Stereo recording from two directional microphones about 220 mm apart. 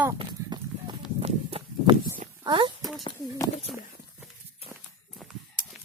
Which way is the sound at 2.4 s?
20° right (ahead or behind).